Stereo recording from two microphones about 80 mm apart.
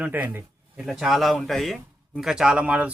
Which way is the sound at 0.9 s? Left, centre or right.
Centre.